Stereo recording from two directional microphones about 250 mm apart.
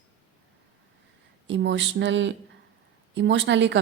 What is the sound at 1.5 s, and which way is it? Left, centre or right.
A woman's voice, right.